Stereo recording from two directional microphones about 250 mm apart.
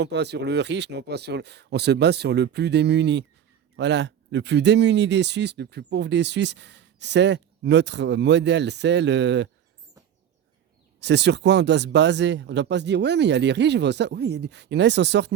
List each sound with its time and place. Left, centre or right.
0.0 s speech: right
11.0 s speech: right